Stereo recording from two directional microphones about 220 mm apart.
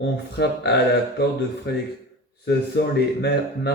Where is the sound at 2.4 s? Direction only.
45° left (ahead or behind).